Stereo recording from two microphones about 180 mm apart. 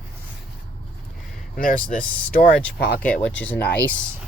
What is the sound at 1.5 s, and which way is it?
Speech, 50° left (ahead or behind).